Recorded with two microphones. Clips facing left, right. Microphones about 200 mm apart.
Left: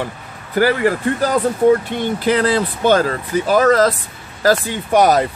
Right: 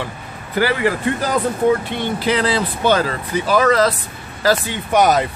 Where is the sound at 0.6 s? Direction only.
45° left (ahead or behind).